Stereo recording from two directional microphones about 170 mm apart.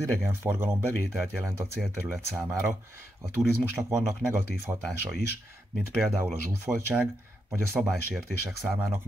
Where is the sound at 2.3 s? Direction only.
15° right (ahead or behind).